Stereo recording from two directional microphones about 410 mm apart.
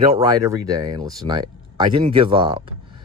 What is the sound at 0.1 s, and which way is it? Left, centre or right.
Speech, centre.